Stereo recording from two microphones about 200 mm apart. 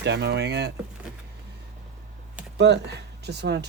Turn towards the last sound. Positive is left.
turn(degrees=-55)  # may be behind; listen again after turning